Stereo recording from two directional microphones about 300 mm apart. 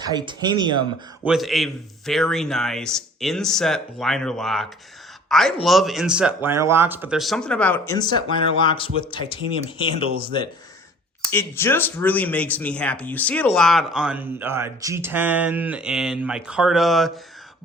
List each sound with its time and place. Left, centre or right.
0.0 s speech: centre
1.2 s speech: centre
11.2 s speech: centre